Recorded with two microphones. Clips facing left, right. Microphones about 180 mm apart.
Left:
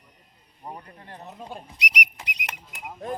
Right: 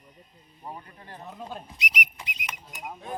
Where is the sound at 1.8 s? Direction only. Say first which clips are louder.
Left 5 dB; 70° left (ahead or behind).